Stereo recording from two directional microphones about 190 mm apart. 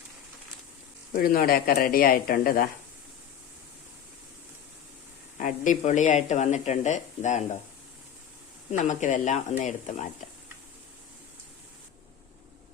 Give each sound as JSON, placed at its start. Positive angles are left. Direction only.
{"t": 1.1, "sound": "speech", "side_deg": 50}
{"t": 5.4, "sound": "speech", "side_deg": 40}
{"t": 8.7, "sound": "speech", "side_deg": 40}